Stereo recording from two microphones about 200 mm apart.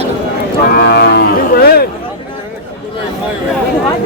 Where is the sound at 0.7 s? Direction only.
55° left (ahead or behind).